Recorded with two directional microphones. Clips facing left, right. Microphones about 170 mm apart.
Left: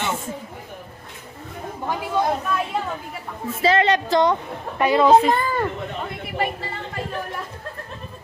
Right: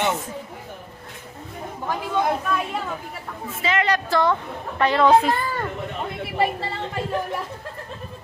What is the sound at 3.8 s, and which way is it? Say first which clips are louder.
A woman's voice: left 2 dB; 20° left (ahead or behind).